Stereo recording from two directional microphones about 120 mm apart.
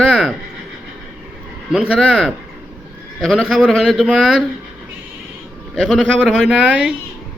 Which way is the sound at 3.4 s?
5° right (ahead or behind).